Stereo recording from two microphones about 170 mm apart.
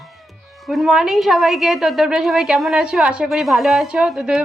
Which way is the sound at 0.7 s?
Centre (ahead or behind).